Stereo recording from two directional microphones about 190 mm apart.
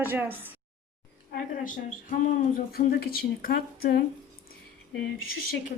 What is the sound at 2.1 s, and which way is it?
Speech, 50° left (ahead or behind).